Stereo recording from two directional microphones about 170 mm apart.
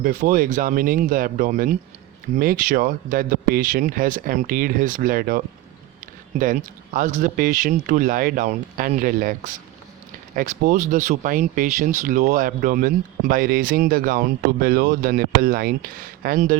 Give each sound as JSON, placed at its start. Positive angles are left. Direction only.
{"t": 0.0, "sound": "speech", "side_deg": -55}
{"t": 6.4, "sound": "speech", "side_deg": -55}